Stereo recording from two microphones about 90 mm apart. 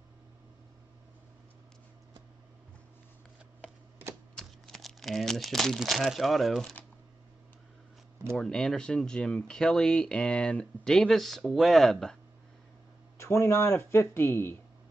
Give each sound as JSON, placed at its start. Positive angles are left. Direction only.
{"t": 4.4, "sound": "speech", "side_deg": 5}
{"t": 8.4, "sound": "speech", "side_deg": 5}
{"t": 13.2, "sound": "speech", "side_deg": 30}